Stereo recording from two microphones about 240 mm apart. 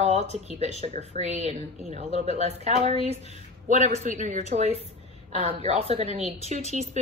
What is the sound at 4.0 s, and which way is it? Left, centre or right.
A woman's voice, right.